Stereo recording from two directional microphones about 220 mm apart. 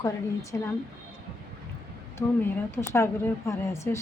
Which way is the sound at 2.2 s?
15° left (ahead or behind).